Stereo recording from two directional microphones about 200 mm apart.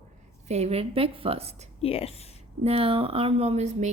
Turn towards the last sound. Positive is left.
turn(degrees=-35)  # may be behind; listen again after turning